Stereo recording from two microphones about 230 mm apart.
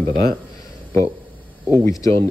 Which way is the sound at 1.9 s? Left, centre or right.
Centre.